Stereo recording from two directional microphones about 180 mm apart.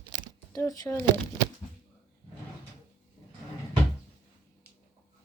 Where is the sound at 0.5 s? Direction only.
20° left (ahead or behind).